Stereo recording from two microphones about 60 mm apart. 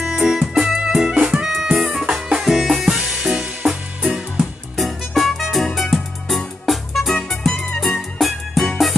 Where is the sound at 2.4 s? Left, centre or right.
Centre.